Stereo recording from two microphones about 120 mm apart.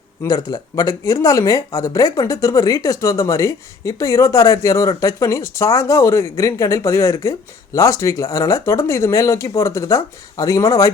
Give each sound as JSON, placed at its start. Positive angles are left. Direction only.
{"t": 0.2, "sound": "speech", "side_deg": 30}